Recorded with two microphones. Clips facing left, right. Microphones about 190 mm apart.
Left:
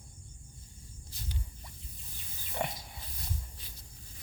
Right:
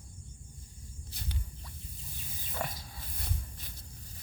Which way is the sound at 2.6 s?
20° left (ahead or behind).